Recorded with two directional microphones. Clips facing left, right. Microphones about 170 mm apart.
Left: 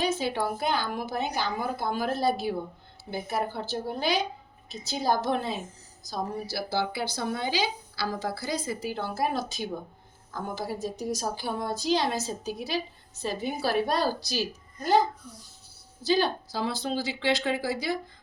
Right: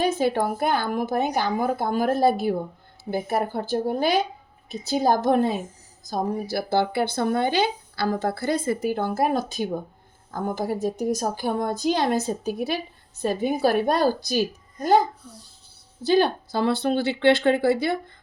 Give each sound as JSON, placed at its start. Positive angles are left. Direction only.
{"t": 0.0, "sound": "speech", "side_deg": -50}
{"t": 16.0, "sound": "speech", "side_deg": -55}